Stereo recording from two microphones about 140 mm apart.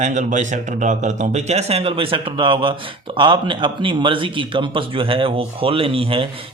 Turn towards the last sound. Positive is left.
turn(degrees=-40)  # may be behind; listen again after turning